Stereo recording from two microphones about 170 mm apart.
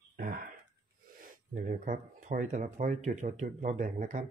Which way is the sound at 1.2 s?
50° right (ahead or behind).